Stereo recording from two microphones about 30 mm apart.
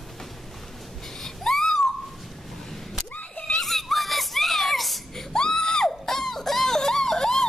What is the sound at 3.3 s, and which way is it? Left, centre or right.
Screaming, left.